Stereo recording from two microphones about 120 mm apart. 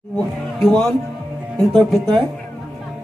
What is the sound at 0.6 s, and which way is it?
Speech, 5° left (ahead or behind).